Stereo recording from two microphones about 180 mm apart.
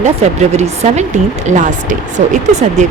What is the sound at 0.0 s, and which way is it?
Speech, 40° right (ahead or behind).